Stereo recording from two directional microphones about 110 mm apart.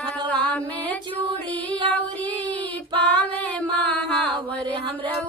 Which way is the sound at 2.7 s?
15° left (ahead or behind).